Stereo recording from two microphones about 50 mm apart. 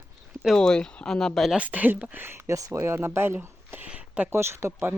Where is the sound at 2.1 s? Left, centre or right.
Right.